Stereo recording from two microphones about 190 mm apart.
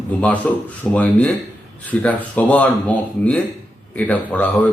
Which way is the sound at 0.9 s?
10° left (ahead or behind).